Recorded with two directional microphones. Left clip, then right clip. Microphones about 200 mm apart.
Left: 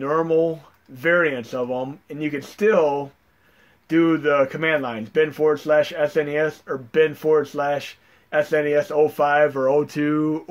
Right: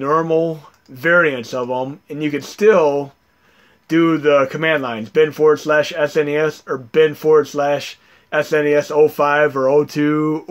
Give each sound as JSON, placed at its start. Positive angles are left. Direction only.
{"t": 0.0, "sound": "speech", "side_deg": -40}